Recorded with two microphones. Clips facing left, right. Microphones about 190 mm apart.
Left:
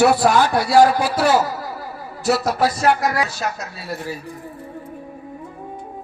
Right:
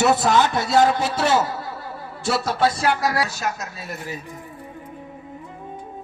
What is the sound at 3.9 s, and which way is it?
Speech, 20° right (ahead or behind).